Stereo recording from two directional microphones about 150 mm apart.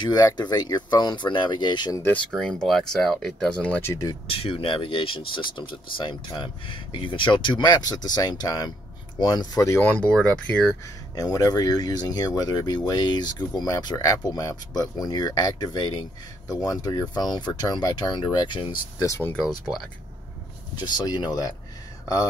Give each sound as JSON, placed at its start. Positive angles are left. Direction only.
{"t": 0.0, "sound": "speech", "side_deg": 30}
{"t": 2.3, "sound": "speech", "side_deg": 0}
{"t": 3.9, "sound": "speech", "side_deg": 25}
{"t": 4.3, "sound": "speech", "side_deg": 40}
{"t": 11.1, "sound": "speech", "side_deg": 25}
{"t": 19.3, "sound": "speech", "side_deg": 0}
{"t": 20.8, "sound": "speech", "side_deg": 25}